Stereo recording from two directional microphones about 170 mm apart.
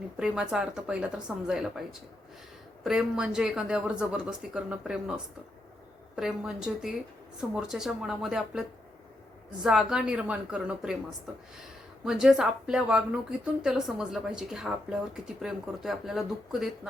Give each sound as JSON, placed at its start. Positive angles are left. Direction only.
{"t": 0.2, "sound": "speech", "side_deg": -5}
{"t": 9.6, "sound": "speech", "side_deg": -5}
{"t": 12.0, "sound": "speech", "side_deg": -5}